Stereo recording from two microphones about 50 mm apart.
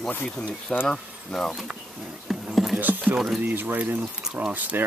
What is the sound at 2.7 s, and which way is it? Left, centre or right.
Speech, right.